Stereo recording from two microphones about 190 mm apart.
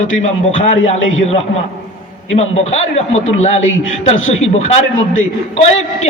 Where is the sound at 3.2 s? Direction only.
90° left.